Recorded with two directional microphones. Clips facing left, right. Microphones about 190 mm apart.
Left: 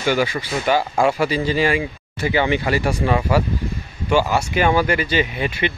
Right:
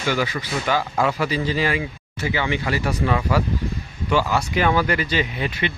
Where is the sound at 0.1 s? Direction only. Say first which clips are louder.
Left 4 dB; 25° left (ahead or behind).